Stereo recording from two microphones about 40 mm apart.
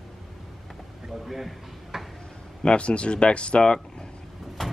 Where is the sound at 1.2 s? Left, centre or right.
Centre.